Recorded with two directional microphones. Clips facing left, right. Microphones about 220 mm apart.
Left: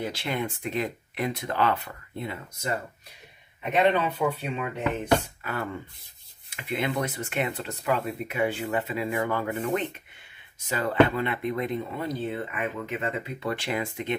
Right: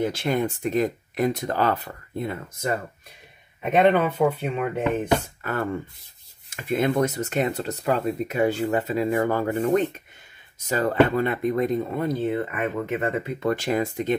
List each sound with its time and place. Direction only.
0.1 s speech: 45° right (ahead or behind)
3.7 s speech: 50° right (ahead or behind)